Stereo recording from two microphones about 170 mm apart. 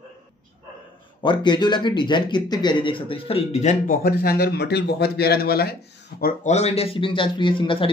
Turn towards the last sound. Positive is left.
turn(degrees=30)  # may be behind; listen again after turning